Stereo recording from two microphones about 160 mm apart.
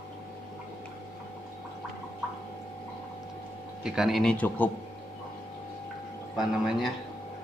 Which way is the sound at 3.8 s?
5° right (ahead or behind).